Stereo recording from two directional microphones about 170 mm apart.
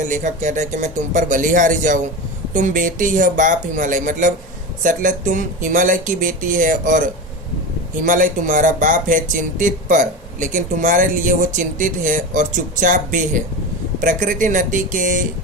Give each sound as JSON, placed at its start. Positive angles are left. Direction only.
{"t": 0.1, "sound": "speech", "side_deg": -50}
{"t": 8.0, "sound": "speech", "side_deg": -50}